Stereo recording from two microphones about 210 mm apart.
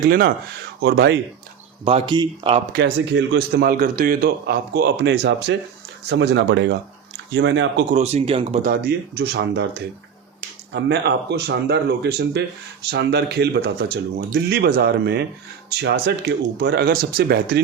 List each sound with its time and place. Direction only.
0.0 s a man's voice: 45° right (ahead or behind)
1.8 s speech: 25° right (ahead or behind)
2.7 s a man's voice: 55° right (ahead or behind)
7.9 s speech: 30° right (ahead or behind)
8.7 s a man's voice: 50° right (ahead or behind)
10.7 s a man's voice: 55° right (ahead or behind)